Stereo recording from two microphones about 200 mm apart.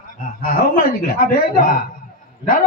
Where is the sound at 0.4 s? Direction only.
45° left (ahead or behind).